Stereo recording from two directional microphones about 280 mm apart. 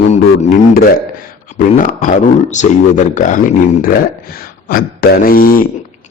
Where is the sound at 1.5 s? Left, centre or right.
Left.